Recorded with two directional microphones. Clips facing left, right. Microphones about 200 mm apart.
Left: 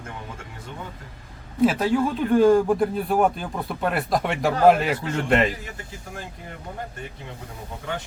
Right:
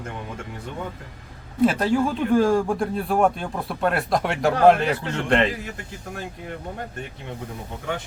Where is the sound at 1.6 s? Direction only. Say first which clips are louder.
Even; centre (ahead or behind).